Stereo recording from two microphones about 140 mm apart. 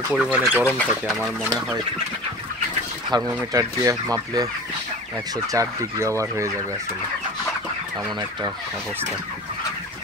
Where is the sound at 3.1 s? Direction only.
25° right (ahead or behind).